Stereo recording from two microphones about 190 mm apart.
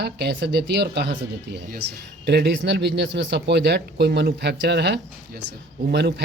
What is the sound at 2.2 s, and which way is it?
A man's voice, 60° right (ahead or behind).